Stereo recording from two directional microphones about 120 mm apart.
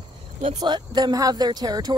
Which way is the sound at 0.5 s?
40° right (ahead or behind).